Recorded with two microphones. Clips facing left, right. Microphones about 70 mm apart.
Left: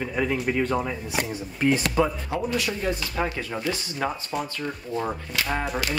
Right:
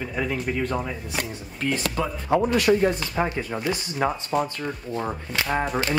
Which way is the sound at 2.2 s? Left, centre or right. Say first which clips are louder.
Right 7 dB; right.